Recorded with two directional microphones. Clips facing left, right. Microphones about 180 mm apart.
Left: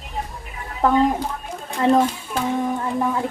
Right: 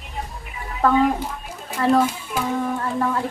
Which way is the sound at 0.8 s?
20° left (ahead or behind).